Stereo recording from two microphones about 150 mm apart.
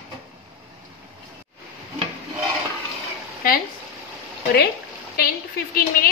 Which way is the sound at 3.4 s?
80° left.